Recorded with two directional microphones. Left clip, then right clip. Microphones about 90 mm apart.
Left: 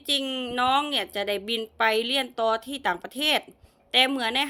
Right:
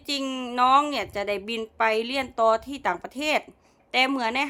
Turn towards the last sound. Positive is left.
turn(degrees=-35)  # may be behind; listen again after turning